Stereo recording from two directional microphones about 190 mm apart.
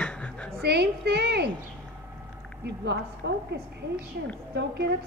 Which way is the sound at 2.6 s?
65° right (ahead or behind).